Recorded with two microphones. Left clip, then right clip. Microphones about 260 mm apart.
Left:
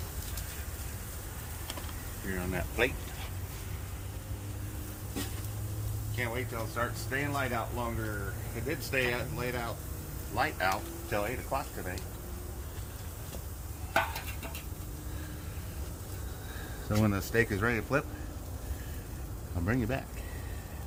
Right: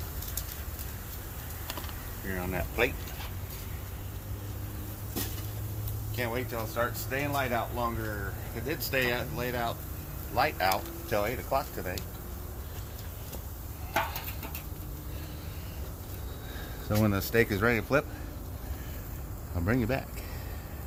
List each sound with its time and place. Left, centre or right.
2.3 s speech: right
6.1 s speech: right
16.9 s speech: centre
19.6 s speech: centre